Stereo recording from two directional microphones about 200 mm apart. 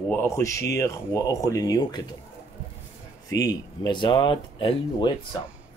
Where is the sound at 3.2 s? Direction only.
15° left (ahead or behind).